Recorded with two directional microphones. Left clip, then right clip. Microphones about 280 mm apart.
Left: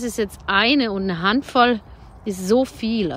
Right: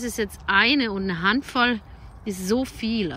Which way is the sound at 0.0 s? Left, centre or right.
Centre.